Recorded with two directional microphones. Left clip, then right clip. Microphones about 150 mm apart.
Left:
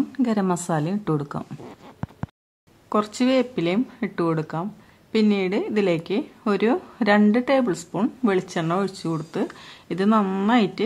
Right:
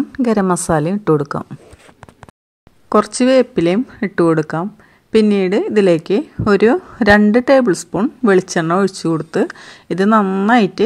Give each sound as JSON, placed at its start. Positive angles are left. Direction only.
{"t": 0.1, "sound": "speech", "side_deg": -40}
{"t": 2.9, "sound": "speech", "side_deg": -40}